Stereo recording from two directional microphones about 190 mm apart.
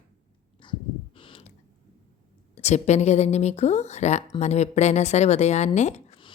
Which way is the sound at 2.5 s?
35° left (ahead or behind).